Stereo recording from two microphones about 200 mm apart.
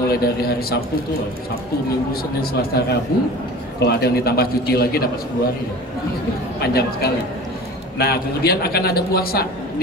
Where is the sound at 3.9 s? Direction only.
50° left (ahead or behind).